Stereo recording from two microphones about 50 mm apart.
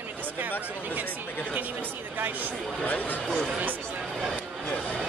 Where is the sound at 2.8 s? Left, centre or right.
Left.